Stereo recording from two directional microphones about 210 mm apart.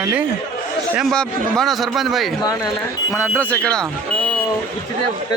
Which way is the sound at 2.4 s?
15° left (ahead or behind).